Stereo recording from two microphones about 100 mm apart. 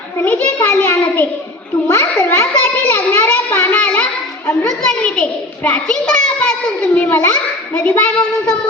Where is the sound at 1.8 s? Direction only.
25° left (ahead or behind); by 6.5 s 10° left (ahead or behind).